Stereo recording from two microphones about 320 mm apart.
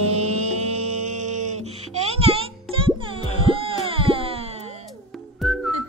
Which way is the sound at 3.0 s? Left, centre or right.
Centre.